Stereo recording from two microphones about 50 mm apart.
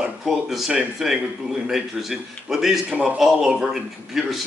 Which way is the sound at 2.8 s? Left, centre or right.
Right.